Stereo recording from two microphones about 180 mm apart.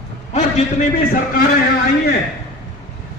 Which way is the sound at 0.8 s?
45° left (ahead or behind).